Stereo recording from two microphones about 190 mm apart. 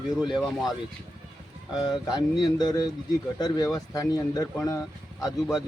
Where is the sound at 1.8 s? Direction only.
20° left (ahead or behind).